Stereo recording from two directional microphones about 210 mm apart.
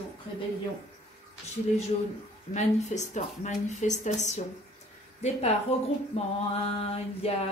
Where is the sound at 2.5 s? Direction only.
35° left (ahead or behind).